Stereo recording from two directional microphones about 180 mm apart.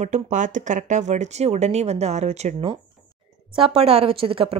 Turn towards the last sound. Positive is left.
turn(degrees=-30)  # may be behind; listen again after turning